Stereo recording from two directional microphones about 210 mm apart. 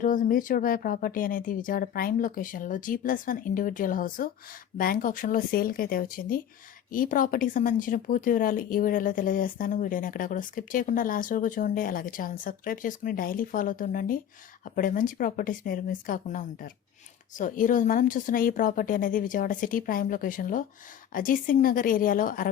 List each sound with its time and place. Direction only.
0.0 s speech: 40° left (ahead or behind)